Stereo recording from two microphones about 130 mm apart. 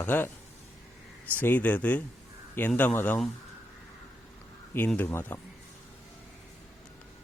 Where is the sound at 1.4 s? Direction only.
15° left (ahead or behind).